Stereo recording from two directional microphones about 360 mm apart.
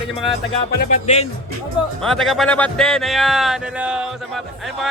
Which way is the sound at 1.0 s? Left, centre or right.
Centre.